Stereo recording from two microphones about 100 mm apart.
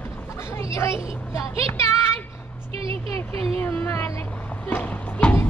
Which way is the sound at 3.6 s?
25° left (ahead or behind).